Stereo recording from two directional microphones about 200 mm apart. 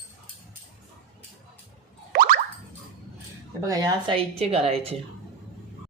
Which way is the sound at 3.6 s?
20° right (ahead or behind).